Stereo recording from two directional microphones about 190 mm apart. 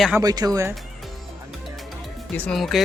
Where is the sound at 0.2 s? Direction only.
20° right (ahead or behind).